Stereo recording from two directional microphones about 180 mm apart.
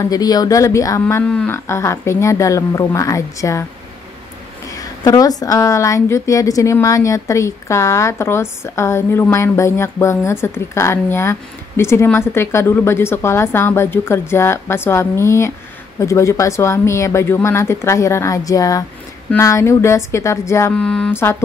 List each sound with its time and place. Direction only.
0.0 s speech: 20° left (ahead or behind)
4.6 s speech: 20° left (ahead or behind)